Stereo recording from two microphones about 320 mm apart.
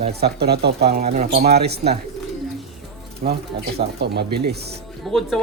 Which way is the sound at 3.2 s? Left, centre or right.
Right.